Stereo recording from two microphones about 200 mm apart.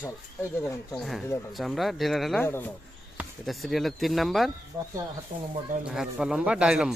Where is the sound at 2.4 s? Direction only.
10° left (ahead or behind).